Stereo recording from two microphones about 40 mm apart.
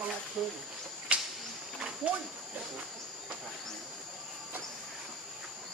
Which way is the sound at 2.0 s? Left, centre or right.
Right.